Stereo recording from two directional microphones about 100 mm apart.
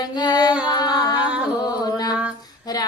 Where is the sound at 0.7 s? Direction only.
45° left (ahead or behind).